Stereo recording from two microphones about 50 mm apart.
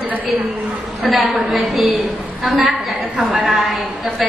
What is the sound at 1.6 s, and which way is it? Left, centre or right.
A woman's voice, centre.